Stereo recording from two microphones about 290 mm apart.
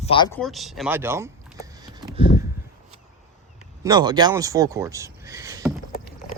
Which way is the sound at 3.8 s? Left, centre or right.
Centre.